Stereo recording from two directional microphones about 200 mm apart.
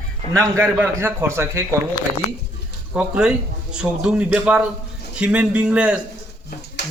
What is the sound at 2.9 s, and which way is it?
Speech, 5° right (ahead or behind).